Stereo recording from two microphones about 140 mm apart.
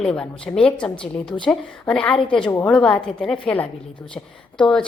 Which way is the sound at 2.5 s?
10° left (ahead or behind).